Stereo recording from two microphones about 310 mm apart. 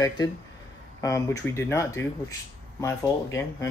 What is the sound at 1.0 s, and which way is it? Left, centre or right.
Speech, centre.